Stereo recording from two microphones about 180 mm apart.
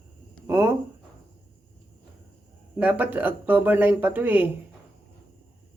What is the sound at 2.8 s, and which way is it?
Speech, 10° right (ahead or behind).